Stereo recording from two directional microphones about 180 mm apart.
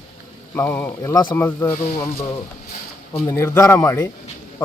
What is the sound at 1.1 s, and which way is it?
Speech, 25° left (ahead or behind).